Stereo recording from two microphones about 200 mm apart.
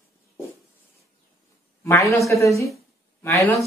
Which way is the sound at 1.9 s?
15° left (ahead or behind).